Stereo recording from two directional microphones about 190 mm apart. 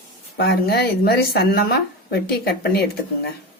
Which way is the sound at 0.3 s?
60° left (ahead or behind).